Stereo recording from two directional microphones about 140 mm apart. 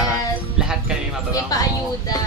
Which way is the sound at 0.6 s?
5° right (ahead or behind).